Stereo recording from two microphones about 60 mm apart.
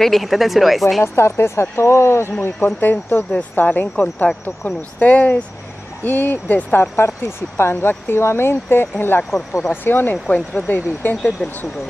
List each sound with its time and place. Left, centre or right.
0.0 s speech: centre
1.0 s speech: left
2.4 s speech: left